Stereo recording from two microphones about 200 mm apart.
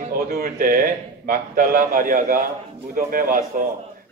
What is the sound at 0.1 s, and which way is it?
A man's voice, 45° right (ahead or behind).